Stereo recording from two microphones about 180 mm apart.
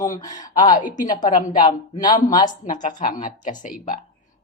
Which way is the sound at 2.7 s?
45° left (ahead or behind).